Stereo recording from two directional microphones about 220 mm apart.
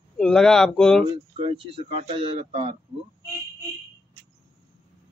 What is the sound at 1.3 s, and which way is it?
Speech, 25° right (ahead or behind).